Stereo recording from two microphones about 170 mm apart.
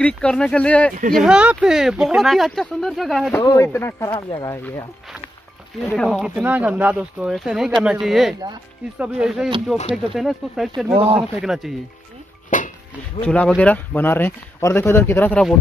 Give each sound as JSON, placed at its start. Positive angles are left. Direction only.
{"t": 0.0, "sound": "speech", "side_deg": 5}
{"t": 1.1, "sound": "speech", "side_deg": -5}
{"t": 3.3, "sound": "speech", "side_deg": 15}
{"t": 5.9, "sound": "speech", "side_deg": 0}
{"t": 12.4, "sound": "music", "side_deg": 50}
{"t": 13.2, "sound": "speech", "side_deg": 5}